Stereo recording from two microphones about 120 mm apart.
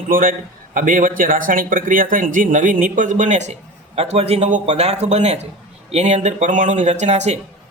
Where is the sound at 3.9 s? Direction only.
60° right (ahead or behind).